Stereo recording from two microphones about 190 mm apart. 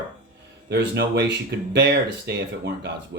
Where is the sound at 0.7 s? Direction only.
60° right (ahead or behind).